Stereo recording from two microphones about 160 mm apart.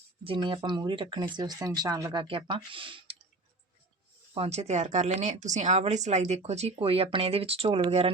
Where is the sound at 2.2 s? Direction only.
35° right (ahead or behind).